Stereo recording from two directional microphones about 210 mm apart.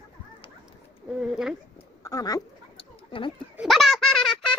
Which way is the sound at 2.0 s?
15° left (ahead or behind).